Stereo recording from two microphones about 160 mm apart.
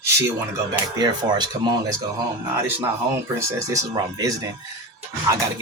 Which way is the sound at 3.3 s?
20° right (ahead or behind).